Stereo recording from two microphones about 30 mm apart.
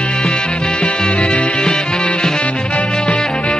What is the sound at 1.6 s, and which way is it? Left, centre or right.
Music, left.